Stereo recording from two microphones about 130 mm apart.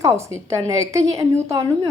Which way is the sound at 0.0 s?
25° right (ahead or behind).